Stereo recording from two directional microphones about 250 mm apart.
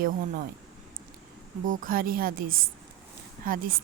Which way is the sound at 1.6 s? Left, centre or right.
Right.